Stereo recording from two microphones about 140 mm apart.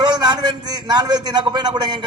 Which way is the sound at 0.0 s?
30° right (ahead or behind).